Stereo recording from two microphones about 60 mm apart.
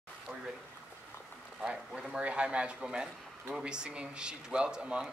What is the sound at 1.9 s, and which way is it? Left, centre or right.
Speech, centre.